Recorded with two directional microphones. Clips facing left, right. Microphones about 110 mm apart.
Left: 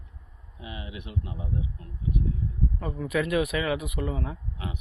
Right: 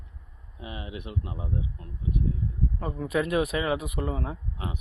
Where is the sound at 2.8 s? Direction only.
30° right (ahead or behind).